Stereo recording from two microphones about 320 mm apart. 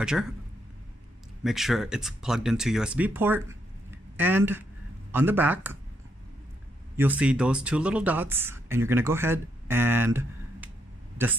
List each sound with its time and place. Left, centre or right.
0.0 s speech: centre
1.4 s speech: centre
7.0 s speech: centre